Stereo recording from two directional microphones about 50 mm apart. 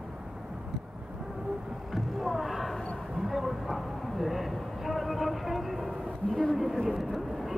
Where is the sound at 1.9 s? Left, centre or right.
Centre.